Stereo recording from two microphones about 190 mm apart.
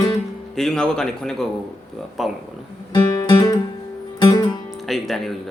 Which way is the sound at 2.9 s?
20° left (ahead or behind).